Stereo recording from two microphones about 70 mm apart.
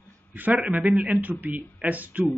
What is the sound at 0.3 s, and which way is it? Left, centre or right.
Speech, right.